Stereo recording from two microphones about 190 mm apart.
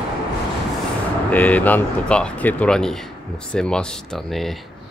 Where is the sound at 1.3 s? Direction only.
10° left (ahead or behind).